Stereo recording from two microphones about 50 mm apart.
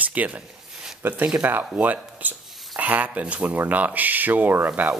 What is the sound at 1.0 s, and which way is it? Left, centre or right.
Speech, right.